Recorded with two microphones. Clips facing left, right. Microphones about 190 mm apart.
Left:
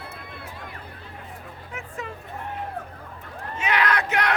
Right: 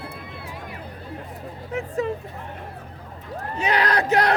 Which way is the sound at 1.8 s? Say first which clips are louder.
Right 11 dB; 35° right (ahead or behind).